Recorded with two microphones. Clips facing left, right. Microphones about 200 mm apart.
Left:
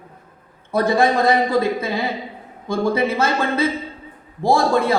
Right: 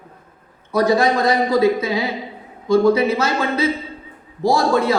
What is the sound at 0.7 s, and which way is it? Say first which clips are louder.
A woman's voice: right 1 dB; 55° left (ahead or behind).